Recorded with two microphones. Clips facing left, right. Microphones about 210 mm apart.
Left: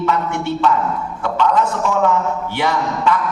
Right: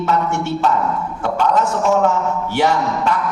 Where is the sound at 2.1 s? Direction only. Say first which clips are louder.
Even; 45° right (ahead or behind).